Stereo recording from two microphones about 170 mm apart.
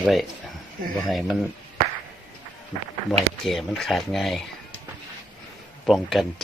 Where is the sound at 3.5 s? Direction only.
Centre (ahead or behind).